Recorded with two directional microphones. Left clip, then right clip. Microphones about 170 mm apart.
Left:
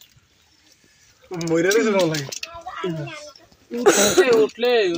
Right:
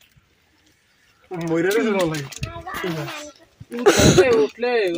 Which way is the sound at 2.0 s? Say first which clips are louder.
Left 2 dB; centre (ahead or behind).